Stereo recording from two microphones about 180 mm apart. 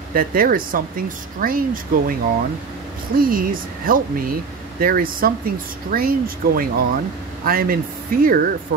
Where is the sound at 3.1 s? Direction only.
50° right (ahead or behind).